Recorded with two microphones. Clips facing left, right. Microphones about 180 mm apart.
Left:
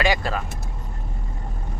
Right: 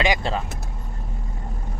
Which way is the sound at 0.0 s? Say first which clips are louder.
Even; 20° right (ahead or behind).